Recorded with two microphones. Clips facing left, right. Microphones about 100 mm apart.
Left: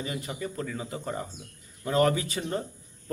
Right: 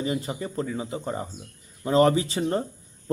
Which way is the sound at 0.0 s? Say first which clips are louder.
Right 5 dB; 30° right (ahead or behind).